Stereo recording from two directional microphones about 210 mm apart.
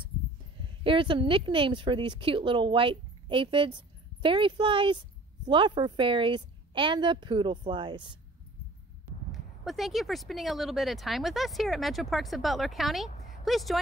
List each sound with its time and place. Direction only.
0.8 s speech: 25° right (ahead or behind)
9.3 s speech: centre (ahead or behind)